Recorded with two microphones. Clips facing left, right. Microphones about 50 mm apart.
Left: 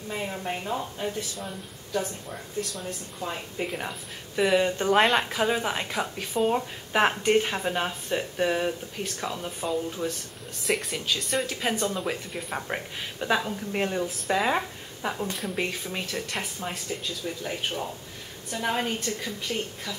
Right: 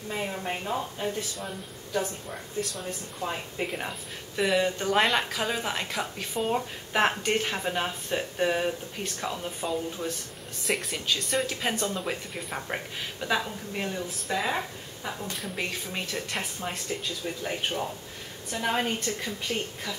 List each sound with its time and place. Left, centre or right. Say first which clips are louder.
0.1 s speech: even; centre
2.6 s speech: right 2 dB; centre
4.9 s speech: left 3 dB; centre
13.7 s speech: left 5 dB; left
15.3 s speech: left 3 dB; centre
17.4 s speech: right 2 dB; centre